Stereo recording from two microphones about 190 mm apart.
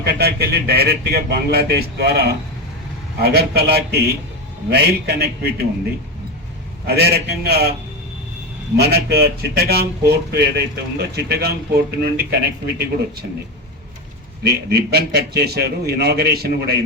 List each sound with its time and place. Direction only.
0.0 s speech: 55° right (ahead or behind)
6.8 s speech: 55° right (ahead or behind)
8.8 s speech: 55° right (ahead or behind)
14.4 s speech: 55° right (ahead or behind)